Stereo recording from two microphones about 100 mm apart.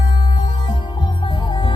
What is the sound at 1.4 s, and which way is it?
Music, 55° left (ahead or behind).